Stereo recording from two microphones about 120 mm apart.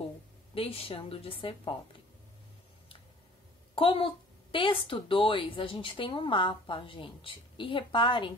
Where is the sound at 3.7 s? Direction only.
45° left (ahead or behind).